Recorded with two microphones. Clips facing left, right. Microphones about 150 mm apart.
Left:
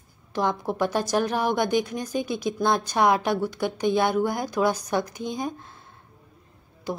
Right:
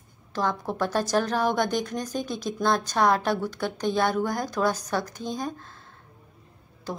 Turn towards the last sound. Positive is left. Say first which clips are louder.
# left 3 dB
turn(degrees=10)  # may be behind; listen again after turning